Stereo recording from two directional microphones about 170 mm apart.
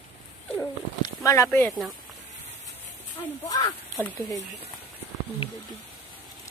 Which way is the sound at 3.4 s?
20° left (ahead or behind).